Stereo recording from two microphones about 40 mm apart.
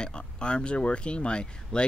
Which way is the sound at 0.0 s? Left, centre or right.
Left.